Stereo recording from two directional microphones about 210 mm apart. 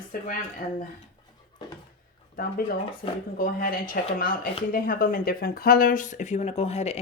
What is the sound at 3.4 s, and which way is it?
Speech, 45° left (ahead or behind).